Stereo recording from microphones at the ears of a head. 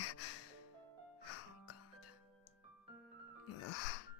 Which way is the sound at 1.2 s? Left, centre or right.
Left.